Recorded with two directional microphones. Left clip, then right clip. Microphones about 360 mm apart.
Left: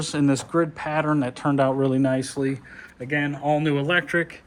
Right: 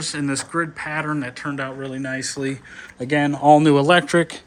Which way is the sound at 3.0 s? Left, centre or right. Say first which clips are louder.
Right 6 dB; right.